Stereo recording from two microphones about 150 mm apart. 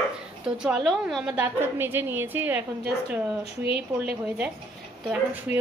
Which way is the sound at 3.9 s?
25° right (ahead or behind).